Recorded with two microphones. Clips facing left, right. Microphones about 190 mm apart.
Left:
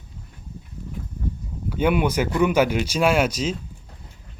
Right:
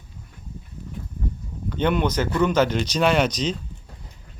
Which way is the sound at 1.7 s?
10° left (ahead or behind).